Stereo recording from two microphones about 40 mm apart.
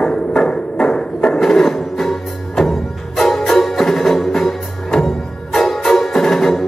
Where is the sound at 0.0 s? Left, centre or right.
Centre.